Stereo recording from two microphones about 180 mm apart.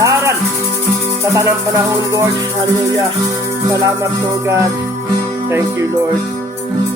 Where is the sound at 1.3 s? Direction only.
15° right (ahead or behind).